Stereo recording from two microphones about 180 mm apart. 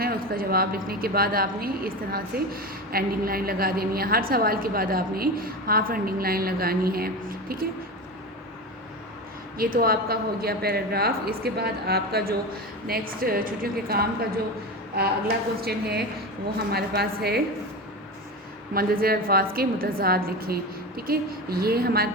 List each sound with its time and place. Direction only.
0.0 s a woman's voice: 55° right (ahead or behind)
9.6 s a woman's voice: 55° right (ahead or behind)
18.7 s a woman's voice: 55° right (ahead or behind)